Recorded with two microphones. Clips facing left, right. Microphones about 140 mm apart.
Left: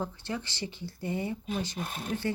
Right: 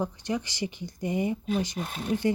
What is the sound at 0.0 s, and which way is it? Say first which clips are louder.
Speech: right 5 dB; 15° right (ahead or behind).